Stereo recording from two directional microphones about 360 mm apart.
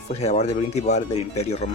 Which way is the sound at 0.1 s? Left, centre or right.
Centre.